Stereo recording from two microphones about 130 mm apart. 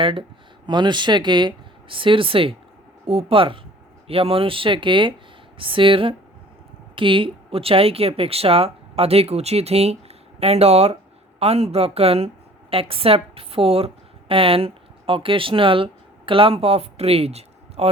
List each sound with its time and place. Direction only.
0.0 s a woman's voice: 40° right (ahead or behind)